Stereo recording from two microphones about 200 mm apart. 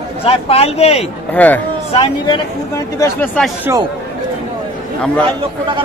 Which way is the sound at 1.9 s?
25° left (ahead or behind).